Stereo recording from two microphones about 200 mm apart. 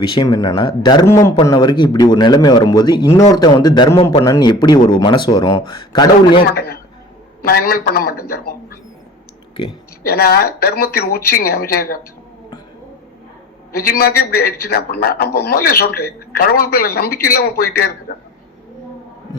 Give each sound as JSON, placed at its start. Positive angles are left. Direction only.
{"t": 0.0, "sound": "speech", "side_deg": 25}
{"t": 7.4, "sound": "a man's voice", "side_deg": 50}
{"t": 8.3, "sound": "a sound", "side_deg": 50}
{"t": 10.0, "sound": "a man's voice", "side_deg": 50}
{"t": 13.7, "sound": "a man's voice", "side_deg": 50}